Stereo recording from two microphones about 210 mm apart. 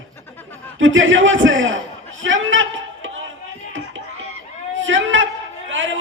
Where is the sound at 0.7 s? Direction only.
65° right (ahead or behind).